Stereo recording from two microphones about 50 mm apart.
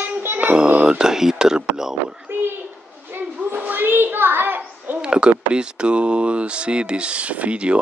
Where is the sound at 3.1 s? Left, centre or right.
Right.